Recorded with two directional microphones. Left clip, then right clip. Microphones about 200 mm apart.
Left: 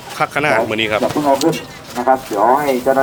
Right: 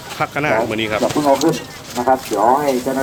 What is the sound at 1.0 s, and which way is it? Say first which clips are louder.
Speech: right 2 dB; 45° left (ahead or behind).